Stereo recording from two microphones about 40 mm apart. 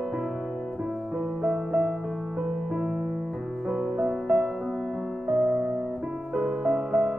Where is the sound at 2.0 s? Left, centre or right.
Centre.